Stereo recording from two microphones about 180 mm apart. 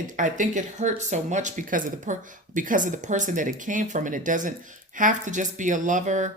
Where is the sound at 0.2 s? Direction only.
45° right (ahead or behind).